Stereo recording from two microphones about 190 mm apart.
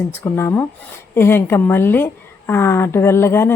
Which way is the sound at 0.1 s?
15° left (ahead or behind).